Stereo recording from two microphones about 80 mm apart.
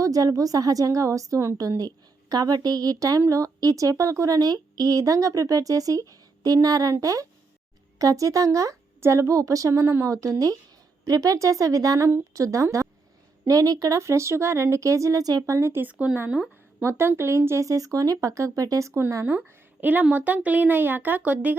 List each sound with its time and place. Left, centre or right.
0.0 s speech: right
15.9 s speech: centre
16.8 s speech: right
19.2 s a woman's voice: right